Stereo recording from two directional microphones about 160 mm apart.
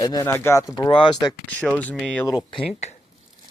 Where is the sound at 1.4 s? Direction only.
10° left (ahead or behind).